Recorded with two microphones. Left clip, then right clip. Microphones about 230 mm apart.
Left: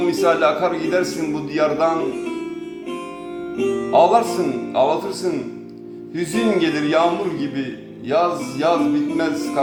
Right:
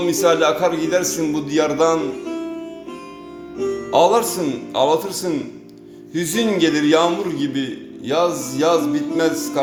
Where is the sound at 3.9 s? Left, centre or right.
Right.